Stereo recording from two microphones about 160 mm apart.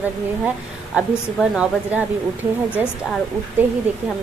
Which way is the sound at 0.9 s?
5° right (ahead or behind).